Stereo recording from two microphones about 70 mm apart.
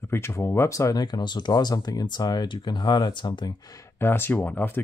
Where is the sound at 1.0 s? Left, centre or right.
Left.